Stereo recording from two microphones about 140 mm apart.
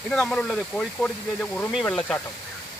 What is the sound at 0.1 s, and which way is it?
Speech, 5° left (ahead or behind).